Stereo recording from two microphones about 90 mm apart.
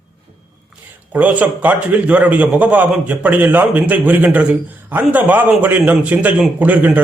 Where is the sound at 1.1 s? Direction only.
15° right (ahead or behind).